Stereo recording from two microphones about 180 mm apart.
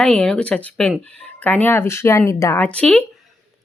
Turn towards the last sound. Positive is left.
turn(degrees=5)  # may be behind; listen again after turning